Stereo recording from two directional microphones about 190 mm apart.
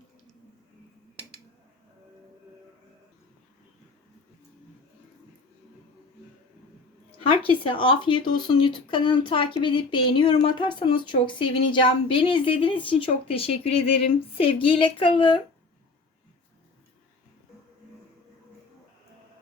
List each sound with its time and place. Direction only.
7.2 s speech: 30° left (ahead or behind)